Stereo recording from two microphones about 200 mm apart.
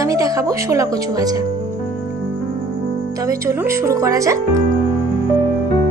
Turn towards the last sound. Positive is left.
turn(degrees=-15)  # may be behind; listen again after turning